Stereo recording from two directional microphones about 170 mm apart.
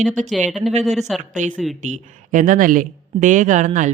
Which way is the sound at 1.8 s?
50° right (ahead or behind).